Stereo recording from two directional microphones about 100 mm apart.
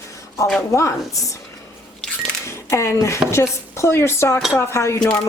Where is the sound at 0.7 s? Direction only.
30° left (ahead or behind).